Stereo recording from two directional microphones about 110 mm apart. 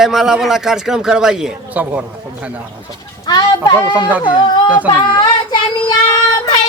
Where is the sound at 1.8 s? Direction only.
20° right (ahead or behind).